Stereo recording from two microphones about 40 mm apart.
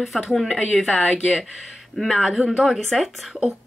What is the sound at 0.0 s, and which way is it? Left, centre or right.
Speech, centre.